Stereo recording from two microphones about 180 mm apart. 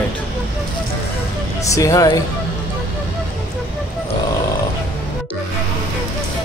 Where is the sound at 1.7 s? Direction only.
20° left (ahead or behind).